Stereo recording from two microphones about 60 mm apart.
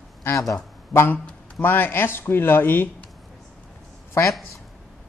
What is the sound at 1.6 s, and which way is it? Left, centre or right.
Speech, left.